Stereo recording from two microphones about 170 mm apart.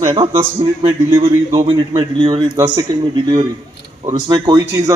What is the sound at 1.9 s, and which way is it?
Speech, 30° right (ahead or behind).